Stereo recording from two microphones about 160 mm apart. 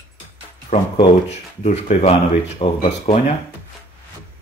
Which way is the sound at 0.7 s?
50° left (ahead or behind).